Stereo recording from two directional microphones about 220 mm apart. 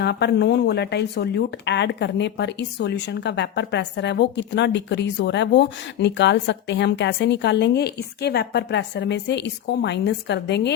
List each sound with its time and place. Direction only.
0.0 s a woman's voice: 50° left (ahead or behind)